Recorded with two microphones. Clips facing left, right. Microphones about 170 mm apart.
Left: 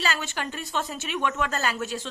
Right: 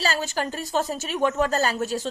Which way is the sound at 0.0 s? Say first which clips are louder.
Right 4 dB; 35° right (ahead or behind).